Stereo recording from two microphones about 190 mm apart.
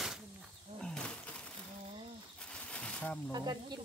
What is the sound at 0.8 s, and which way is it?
Wild animals, 5° left (ahead or behind).